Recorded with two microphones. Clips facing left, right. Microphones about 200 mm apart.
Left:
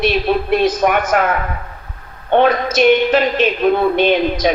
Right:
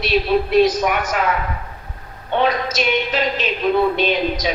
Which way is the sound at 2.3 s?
55° left (ahead or behind).